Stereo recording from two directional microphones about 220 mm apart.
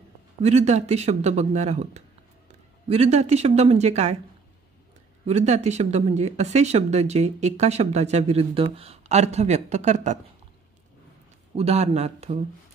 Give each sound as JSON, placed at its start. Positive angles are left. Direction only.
{"t": 0.4, "sound": "speech", "side_deg": -30}
{"t": 5.2, "sound": "speech", "side_deg": -30}
{"t": 11.5, "sound": "speech", "side_deg": -30}